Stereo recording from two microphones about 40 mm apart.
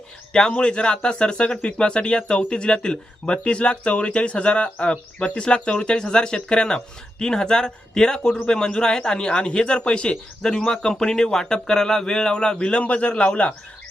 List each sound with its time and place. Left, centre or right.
0.5 s speech: left
10.4 s a man's voice: centre